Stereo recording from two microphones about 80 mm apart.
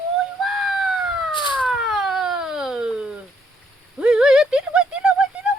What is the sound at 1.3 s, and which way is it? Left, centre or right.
Emergency vehicle, left.